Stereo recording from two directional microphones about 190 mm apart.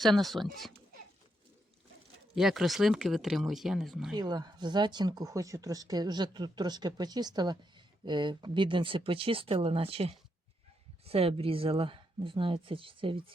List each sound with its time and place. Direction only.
0.0 s speech: centre (ahead or behind)
2.3 s speech: centre (ahead or behind)
4.1 s speech: 20° right (ahead or behind)